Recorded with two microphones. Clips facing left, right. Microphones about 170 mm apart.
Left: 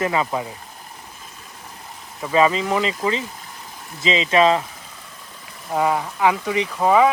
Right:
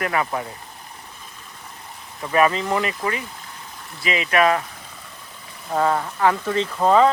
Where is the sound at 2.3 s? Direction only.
20° left (ahead or behind).